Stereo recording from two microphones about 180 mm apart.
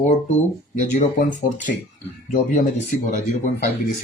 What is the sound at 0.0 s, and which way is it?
Speech, 40° left (ahead or behind).